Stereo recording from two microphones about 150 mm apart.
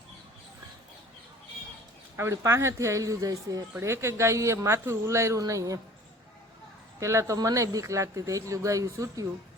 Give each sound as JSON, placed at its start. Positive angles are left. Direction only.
{"t": 2.1, "sound": "speech", "side_deg": -20}
{"t": 7.0, "sound": "speech", "side_deg": -20}